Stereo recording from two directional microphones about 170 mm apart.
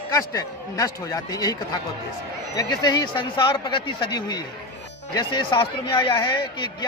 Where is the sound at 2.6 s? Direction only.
25° left (ahead or behind).